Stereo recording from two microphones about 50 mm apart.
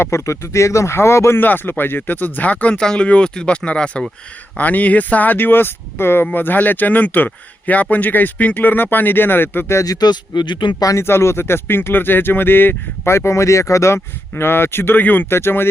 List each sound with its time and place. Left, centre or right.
0.0 s speech: left
1.4 s speech: left
2.7 s speech: centre
4.5 s speech: left
6.3 s speech: left
10.9 s speech: left
13.1 s speech: left